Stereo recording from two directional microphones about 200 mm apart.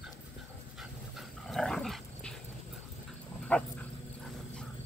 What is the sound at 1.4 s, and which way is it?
Dog, 5° left (ahead or behind).